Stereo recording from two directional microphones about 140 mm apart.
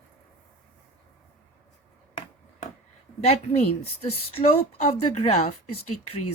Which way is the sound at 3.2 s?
45° left (ahead or behind).